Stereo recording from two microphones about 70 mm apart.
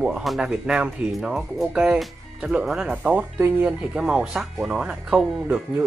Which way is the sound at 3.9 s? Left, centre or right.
Centre.